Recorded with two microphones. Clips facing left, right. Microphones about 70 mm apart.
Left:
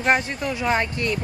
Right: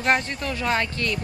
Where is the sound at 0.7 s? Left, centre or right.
Centre.